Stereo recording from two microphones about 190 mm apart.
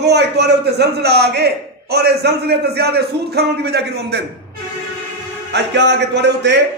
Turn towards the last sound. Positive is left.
turn(degrees=-65)  # may be behind; listen again after turning